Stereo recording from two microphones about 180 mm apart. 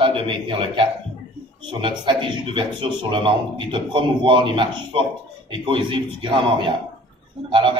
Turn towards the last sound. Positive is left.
turn(degrees=-25)  # may be behind; listen again after turning